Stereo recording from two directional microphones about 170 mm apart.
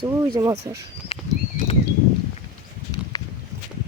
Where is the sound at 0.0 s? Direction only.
20° right (ahead or behind).